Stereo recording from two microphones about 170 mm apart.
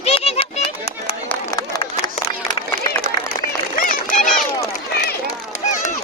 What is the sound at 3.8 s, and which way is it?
Run, 55° left (ahead or behind).